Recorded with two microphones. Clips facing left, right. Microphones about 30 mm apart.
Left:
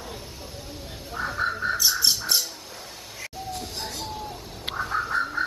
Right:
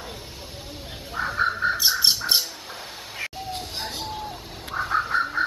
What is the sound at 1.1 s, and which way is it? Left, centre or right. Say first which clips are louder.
Frog: right 3 dB; right.